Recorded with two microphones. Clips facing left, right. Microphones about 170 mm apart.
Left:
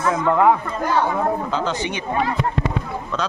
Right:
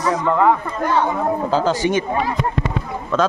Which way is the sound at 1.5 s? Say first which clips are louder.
Right 6 dB; 40° right (ahead or behind).